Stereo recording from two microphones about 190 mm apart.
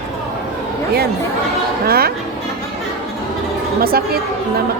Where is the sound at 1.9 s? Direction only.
55° right (ahead or behind).